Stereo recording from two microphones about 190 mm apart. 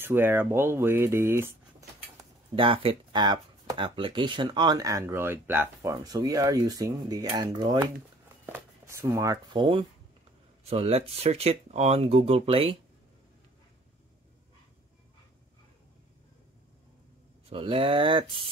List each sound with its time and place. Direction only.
0.0 s speech: 10° right (ahead or behind)
2.5 s speech: 25° right (ahead or behind)
17.5 s speech: 30° right (ahead or behind)